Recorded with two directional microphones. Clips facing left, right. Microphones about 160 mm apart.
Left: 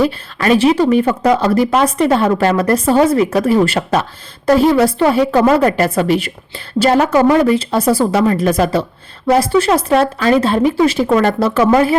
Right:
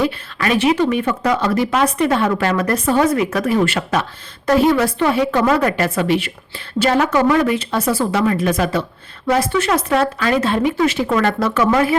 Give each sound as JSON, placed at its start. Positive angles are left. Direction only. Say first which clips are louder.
{"t": 0.0, "sound": "speech", "louder": "left 4 dB", "side_deg": 35}